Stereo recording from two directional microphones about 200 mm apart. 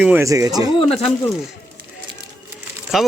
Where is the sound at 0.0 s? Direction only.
10° right (ahead or behind).